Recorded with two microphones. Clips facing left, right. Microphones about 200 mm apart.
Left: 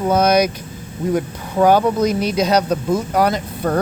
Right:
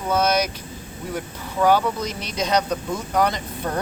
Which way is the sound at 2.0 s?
10° left (ahead or behind).